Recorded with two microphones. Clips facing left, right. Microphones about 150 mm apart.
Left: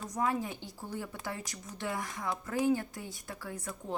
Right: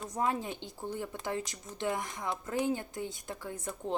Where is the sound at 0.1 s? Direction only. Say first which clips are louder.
Even; 25° right (ahead or behind).